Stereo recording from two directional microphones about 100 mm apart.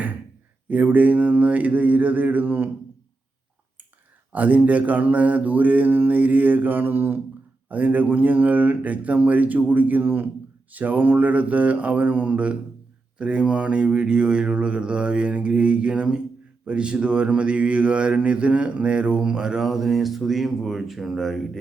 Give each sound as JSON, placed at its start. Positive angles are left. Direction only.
{"t": 0.7, "sound": "speech", "side_deg": -15}
{"t": 4.3, "sound": "speech", "side_deg": -15}